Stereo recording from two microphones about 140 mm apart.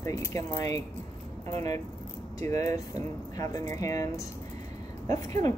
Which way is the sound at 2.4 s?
20° left (ahead or behind).